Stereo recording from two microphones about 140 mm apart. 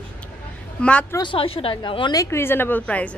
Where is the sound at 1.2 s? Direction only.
40° left (ahead or behind); by 3.1 s 10° left (ahead or behind).